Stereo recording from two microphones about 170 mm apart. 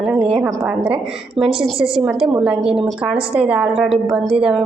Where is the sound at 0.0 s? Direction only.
5° right (ahead or behind).